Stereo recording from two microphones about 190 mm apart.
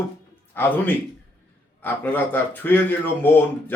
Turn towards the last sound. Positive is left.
turn(degrees=10)  # may be behind; listen again after turning